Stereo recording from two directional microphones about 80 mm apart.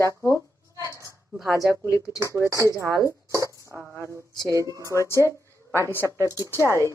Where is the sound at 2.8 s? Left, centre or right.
Right.